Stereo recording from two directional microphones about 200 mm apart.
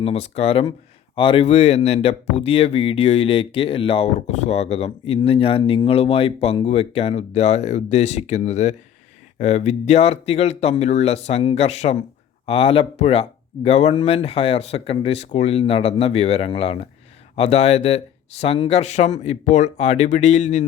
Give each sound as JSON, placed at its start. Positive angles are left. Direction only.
{"t": 0.0, "sound": "speech", "side_deg": 30}